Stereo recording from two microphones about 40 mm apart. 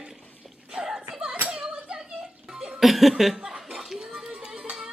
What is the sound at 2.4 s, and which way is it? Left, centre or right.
Cough, centre.